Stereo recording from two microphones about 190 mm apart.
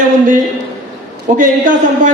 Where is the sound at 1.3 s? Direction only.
40° right (ahead or behind).